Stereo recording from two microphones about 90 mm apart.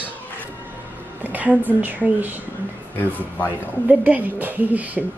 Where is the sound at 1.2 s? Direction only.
20° right (ahead or behind).